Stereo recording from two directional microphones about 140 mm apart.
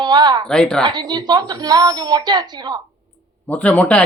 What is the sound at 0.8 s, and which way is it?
A woman's voice, 30° right (ahead or behind).